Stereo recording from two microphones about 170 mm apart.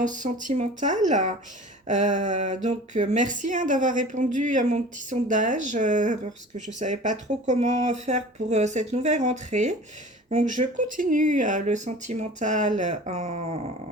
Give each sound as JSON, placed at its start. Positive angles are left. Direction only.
{"t": 0.0, "sound": "speech", "side_deg": -50}